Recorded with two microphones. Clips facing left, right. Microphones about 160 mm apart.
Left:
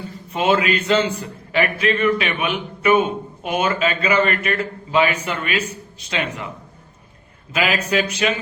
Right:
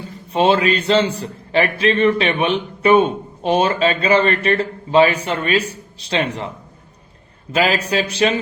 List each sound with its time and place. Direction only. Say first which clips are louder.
0.3 s a man's voice: right 3 dB; 30° right (ahead or behind)
7.5 s a man's voice: right 2 dB; 35° right (ahead or behind)